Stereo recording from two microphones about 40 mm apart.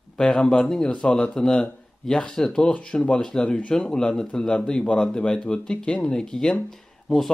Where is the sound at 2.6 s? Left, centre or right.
Left.